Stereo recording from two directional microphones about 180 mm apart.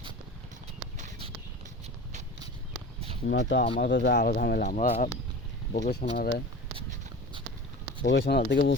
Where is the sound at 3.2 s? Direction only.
55° left (ahead or behind).